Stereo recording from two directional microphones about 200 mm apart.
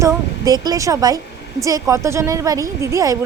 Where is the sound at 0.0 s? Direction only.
20° right (ahead or behind).